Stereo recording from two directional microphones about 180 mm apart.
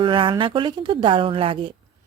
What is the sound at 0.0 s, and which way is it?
A woman's voice, 30° right (ahead or behind).